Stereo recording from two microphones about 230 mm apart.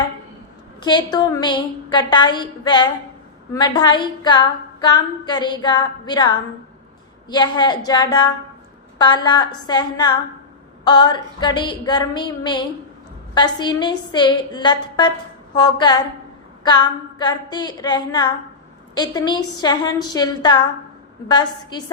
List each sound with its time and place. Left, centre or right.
0.8 s a woman's voice: centre